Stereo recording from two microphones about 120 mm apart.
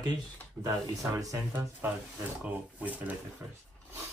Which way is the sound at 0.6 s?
10° right (ahead or behind).